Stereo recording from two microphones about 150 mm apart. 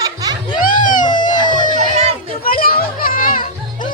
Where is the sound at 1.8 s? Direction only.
50° right (ahead or behind).